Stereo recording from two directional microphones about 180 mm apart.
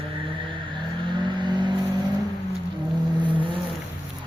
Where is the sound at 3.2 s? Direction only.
25° right (ahead or behind).